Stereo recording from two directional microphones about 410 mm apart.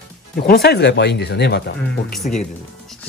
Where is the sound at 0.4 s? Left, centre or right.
Left.